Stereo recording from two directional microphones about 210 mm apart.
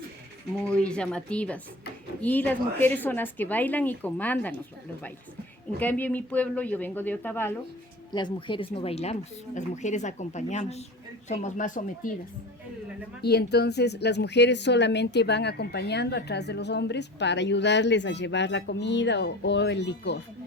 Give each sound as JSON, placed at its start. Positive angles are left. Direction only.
{"t": 0.7, "sound": "a woman's voice", "side_deg": 5}
{"t": 5.8, "sound": "speech", "side_deg": 10}
{"t": 8.1, "sound": "speech", "side_deg": 20}
{"t": 13.2, "sound": "speech", "side_deg": 50}